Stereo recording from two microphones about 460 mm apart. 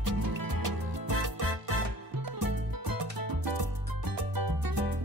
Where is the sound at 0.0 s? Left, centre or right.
Right.